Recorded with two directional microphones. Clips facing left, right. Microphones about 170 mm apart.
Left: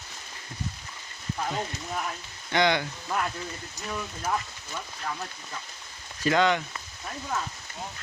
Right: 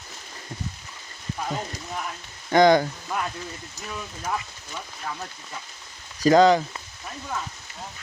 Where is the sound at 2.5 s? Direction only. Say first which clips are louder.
Right 8 dB; 40° right (ahead or behind).